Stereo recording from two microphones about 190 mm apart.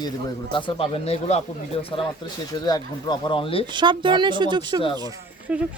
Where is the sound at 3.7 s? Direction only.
25° right (ahead or behind).